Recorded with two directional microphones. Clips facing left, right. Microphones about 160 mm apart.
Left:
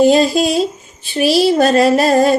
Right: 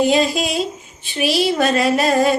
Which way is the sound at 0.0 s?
35° left (ahead or behind).